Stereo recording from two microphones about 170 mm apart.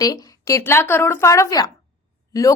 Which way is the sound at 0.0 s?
20° left (ahead or behind).